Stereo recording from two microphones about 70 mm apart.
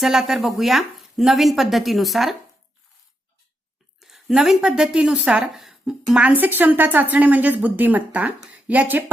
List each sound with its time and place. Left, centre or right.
0.0 s speech: centre
4.0 s a woman's voice: centre
5.4 s speech: centre
6.2 s a woman's voice: right